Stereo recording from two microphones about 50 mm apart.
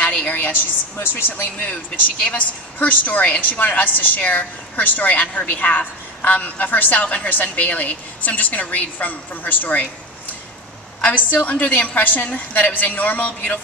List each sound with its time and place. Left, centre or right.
0.0 s a woman's voice: left
0.9 s speech: left
1.6 s a woman's voice: left
11.0 s a woman's voice: left